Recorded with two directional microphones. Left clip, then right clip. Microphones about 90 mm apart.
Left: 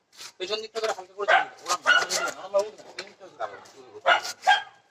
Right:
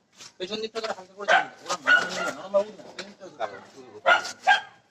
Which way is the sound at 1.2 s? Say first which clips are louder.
Even; 25° right (ahead or behind).